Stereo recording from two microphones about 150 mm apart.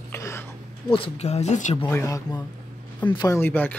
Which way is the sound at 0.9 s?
40° left (ahead or behind).